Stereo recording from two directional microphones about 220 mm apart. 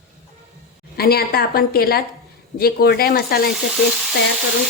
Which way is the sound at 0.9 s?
45° left (ahead or behind).